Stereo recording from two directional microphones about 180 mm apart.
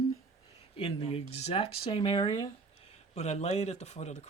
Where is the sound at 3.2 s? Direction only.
35° left (ahead or behind).